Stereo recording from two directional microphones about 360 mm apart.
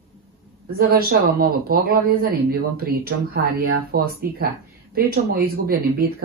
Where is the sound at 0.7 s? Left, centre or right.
Right.